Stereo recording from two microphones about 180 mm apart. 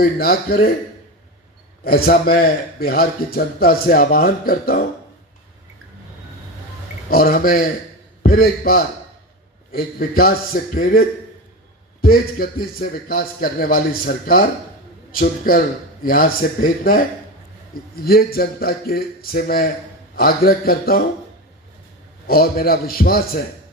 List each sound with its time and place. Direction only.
0.0 s a man's voice: 55° left (ahead or behind)
1.8 s a man's voice: 55° left (ahead or behind)
7.1 s a man's voice: 55° left (ahead or behind)
12.0 s a man's voice: 55° left (ahead or behind)
22.3 s a man's voice: 55° left (ahead or behind)